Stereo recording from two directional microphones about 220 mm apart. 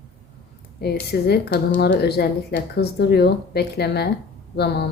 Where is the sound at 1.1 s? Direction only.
50° left (ahead or behind).